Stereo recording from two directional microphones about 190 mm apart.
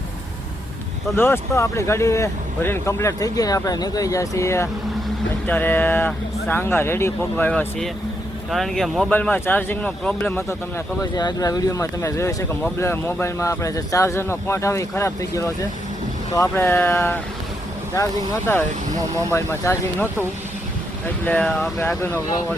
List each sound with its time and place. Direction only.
1.1 s speech: 10° left (ahead or behind)
11.0 s speech: 20° left (ahead or behind)
21.2 s speech: 5° left (ahead or behind)